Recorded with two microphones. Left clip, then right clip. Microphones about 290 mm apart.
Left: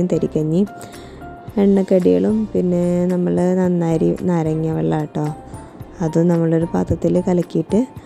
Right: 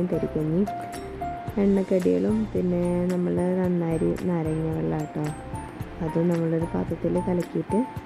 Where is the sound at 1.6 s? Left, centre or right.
Left.